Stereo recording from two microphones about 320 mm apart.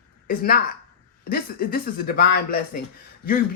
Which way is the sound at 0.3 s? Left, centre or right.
Left.